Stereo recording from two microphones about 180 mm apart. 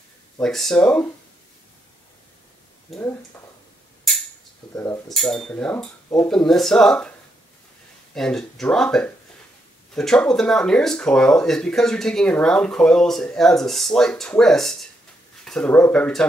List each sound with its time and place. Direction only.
0.4 s speech: centre (ahead or behind)
2.9 s speech: 10° left (ahead or behind)
4.7 s speech: 15° left (ahead or behind)
5.1 s speech: centre (ahead or behind)